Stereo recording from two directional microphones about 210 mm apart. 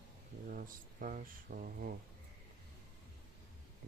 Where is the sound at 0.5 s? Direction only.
40° right (ahead or behind).